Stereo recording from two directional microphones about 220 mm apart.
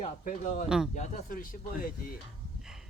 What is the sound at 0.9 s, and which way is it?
Speech, 35° left (ahead or behind).